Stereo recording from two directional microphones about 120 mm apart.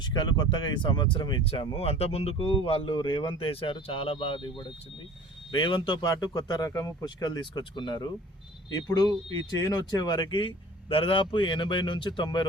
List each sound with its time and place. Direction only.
0.0 s speech: 35° left (ahead or behind)